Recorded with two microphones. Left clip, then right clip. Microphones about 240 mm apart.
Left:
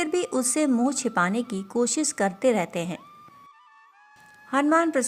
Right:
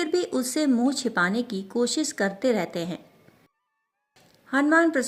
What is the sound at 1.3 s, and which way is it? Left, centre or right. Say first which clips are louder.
Speech: even; left.